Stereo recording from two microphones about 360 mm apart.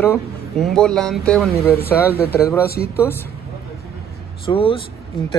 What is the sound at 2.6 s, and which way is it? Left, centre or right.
Speech, left.